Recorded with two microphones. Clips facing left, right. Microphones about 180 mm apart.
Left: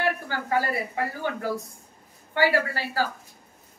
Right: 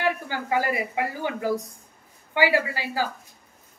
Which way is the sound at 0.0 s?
15° right (ahead or behind).